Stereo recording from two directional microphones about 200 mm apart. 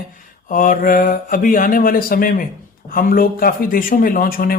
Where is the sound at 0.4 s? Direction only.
40° left (ahead or behind).